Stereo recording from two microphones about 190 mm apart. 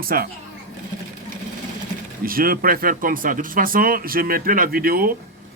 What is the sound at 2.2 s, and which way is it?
Speech, 50° right (ahead or behind).